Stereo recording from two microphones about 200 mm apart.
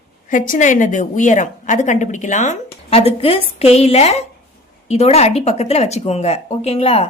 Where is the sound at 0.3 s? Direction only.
40° left (ahead or behind).